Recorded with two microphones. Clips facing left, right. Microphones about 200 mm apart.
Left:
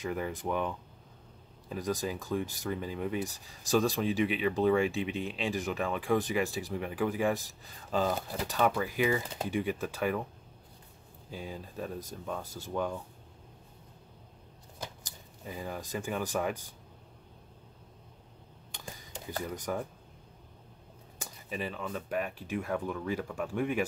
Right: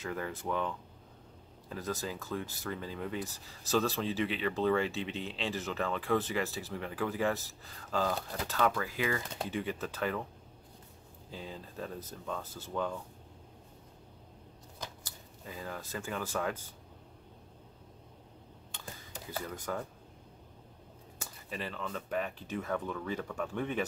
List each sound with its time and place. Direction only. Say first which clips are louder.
0.0 s speech: left 3 dB; 15° left (ahead or behind)
11.2 s speech: left 3 dB; 15° left (ahead or behind)
15.0 s speech: left 3 dB; 15° left (ahead or behind)
19.4 s speech: left 4 dB; 15° left (ahead or behind)
21.2 s speech: left 3 dB; 15° left (ahead or behind)